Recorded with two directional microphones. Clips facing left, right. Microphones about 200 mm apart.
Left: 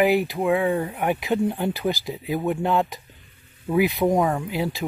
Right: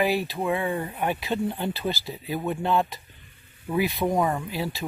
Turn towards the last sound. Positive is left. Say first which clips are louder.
# left 4 dB
turn(degrees=20)  # may be behind; listen again after turning